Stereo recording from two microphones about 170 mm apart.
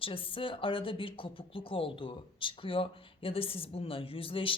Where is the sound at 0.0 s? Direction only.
30° left (ahead or behind).